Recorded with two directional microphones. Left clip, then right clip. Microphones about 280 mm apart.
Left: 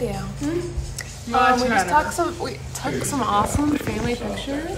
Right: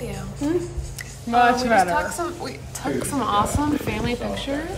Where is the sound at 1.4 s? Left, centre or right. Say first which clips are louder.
Right 1 dB; right.